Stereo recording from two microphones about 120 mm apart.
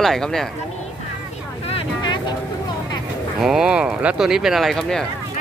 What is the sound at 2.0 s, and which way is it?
Vehicle, 40° left (ahead or behind).